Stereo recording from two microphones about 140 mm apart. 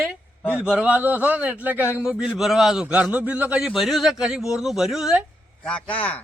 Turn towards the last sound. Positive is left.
turn(degrees=10)  # may be behind; listen again after turning